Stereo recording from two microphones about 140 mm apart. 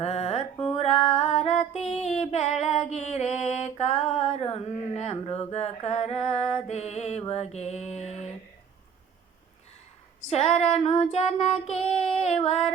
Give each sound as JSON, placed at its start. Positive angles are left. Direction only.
{"t": 0.0, "sound": "music", "side_deg": 50}
{"t": 5.5, "sound": "child singing", "side_deg": 50}
{"t": 6.7, "sound": "music", "side_deg": 50}
{"t": 10.2, "sound": "child singing", "side_deg": 50}